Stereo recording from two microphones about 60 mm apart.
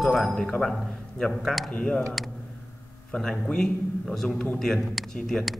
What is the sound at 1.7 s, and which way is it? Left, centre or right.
Speech, centre.